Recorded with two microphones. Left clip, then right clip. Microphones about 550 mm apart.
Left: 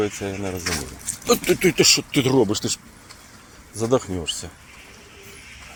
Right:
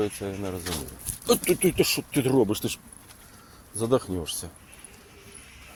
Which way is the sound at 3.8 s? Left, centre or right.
Right.